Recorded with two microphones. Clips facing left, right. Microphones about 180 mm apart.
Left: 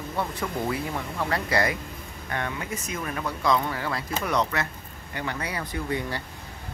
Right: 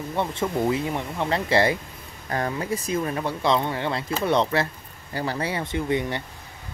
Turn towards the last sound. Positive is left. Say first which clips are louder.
# right 5 dB
turn(degrees=-20)  # may be behind; listen again after turning